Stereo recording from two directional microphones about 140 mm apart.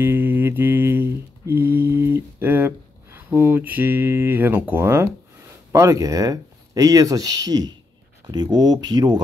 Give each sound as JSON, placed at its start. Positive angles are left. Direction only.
{"t": 0.0, "sound": "mantra", "side_deg": -15}
{"t": 5.7, "sound": "speech", "side_deg": -20}